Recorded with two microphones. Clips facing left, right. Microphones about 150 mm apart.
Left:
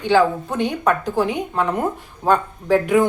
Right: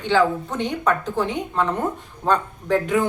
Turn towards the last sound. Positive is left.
turn(degrees=10)  # may be behind; listen again after turning